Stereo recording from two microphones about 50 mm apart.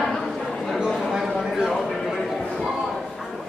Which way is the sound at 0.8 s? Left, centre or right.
Centre.